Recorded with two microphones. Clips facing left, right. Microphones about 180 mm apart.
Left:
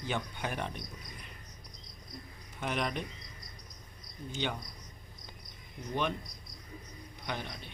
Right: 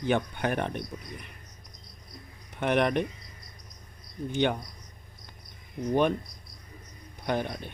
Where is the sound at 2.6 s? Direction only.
65° right (ahead or behind).